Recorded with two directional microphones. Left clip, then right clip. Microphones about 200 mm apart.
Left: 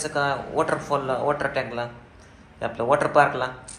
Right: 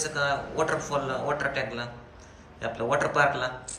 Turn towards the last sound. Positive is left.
turn(degrees=0)  # may be behind; listen again after turning